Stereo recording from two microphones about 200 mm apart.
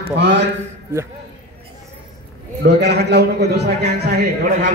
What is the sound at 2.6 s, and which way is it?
A man's voice, 55° right (ahead or behind).